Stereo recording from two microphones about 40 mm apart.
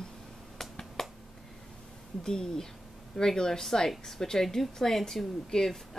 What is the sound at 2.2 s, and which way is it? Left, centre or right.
Speech, centre.